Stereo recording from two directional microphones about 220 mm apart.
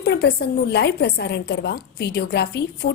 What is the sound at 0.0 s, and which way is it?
A woman's voice, 45° left (ahead or behind).